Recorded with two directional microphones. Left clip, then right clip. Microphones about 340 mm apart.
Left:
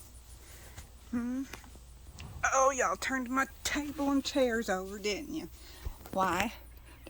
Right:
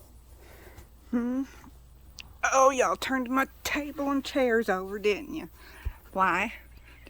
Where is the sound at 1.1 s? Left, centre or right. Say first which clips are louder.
Right 6 dB; right.